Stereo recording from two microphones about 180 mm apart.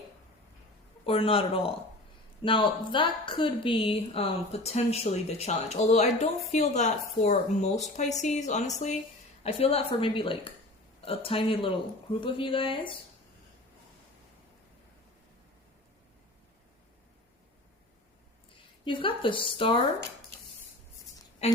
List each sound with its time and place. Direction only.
1.0 s a woman's voice: 30° left (ahead or behind)
18.9 s speech: 30° left (ahead or behind)
21.4 s speech: 35° left (ahead or behind)